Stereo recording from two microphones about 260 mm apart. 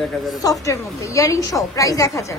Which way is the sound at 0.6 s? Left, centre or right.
Centre.